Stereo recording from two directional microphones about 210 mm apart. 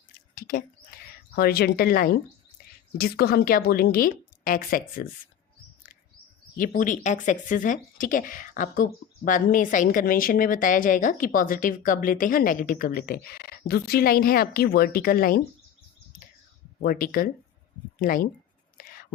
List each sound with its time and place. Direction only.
0.3 s speech: 45° left (ahead or behind)
2.6 s a sound: 45° left (ahead or behind)
3.0 s a woman's voice: 50° left (ahead or behind)
6.6 s speech: 40° left (ahead or behind)
16.8 s a woman's voice: 40° left (ahead or behind)
18.8 s whispering: 40° left (ahead or behind)